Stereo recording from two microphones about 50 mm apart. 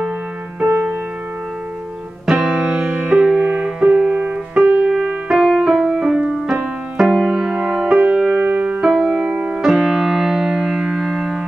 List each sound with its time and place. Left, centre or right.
0.6 s music: right
2.2 s music: centre
2.5 s music: right
5.3 s music: centre
8.9 s music: centre